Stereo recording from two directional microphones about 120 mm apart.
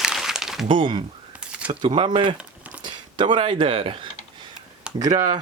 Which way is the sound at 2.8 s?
40° right (ahead or behind).